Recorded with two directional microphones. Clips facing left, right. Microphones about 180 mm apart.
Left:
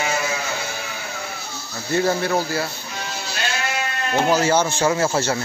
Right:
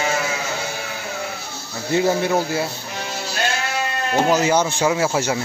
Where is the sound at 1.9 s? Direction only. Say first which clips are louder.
Right 2 dB; 15° right (ahead or behind).